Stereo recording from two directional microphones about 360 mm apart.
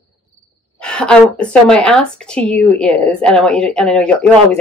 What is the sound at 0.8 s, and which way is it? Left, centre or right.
Speech, centre.